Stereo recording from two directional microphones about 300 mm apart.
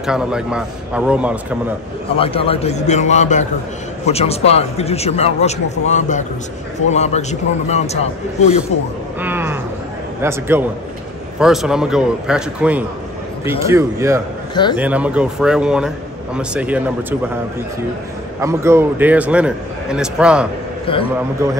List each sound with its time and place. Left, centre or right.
0.0 s a man's voice: centre
2.1 s a man's voice: centre
9.2 s a man's voice: centre
14.5 s a man's voice: centre
14.8 s a man's voice: centre
18.4 s a man's voice: centre
20.9 s a man's voice: centre